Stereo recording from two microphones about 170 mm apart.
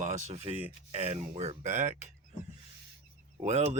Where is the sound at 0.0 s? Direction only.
45° right (ahead or behind).